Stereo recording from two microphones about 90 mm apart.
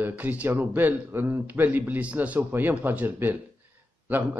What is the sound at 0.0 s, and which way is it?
Speech, 20° right (ahead or behind).